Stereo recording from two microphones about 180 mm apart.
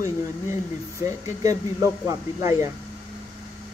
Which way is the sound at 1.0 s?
20° right (ahead or behind).